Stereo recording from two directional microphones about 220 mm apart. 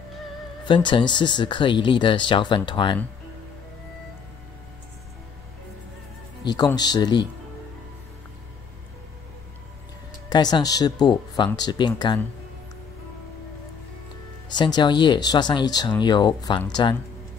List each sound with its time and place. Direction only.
0.7 s speech: 20° left (ahead or behind)
6.4 s speech: 20° left (ahead or behind)
10.3 s speech: 20° left (ahead or behind)
14.5 s speech: 20° left (ahead or behind)